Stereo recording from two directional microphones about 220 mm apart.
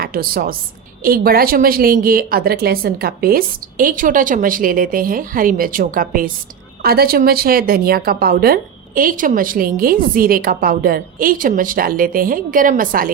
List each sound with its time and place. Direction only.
0.0 s a woman's voice: 40° right (ahead or behind)